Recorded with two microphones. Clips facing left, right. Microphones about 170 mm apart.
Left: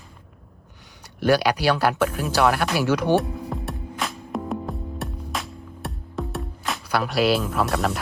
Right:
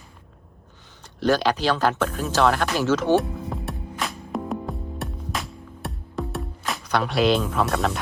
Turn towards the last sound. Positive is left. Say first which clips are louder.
# even
turn(degrees=0)  # may be behind; listen again after turning